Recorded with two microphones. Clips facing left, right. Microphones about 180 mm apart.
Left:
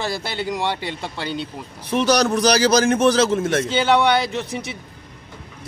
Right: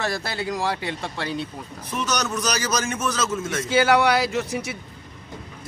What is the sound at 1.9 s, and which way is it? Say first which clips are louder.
Speech: left 8 dB; 55° left (ahead or behind).